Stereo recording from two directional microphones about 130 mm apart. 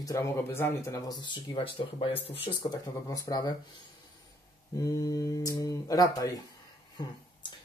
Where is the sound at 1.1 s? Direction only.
35° left (ahead or behind).